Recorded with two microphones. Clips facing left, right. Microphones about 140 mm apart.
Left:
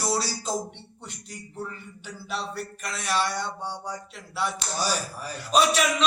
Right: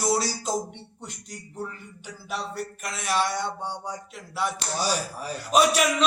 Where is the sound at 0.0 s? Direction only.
15° right (ahead or behind).